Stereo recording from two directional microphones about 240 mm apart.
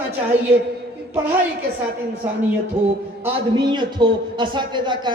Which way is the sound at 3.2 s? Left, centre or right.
Centre.